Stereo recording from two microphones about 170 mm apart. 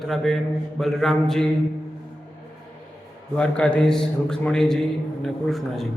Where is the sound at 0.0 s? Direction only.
Centre (ahead or behind).